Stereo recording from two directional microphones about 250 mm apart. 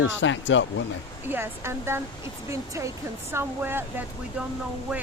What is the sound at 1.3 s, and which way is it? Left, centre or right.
Speech, centre.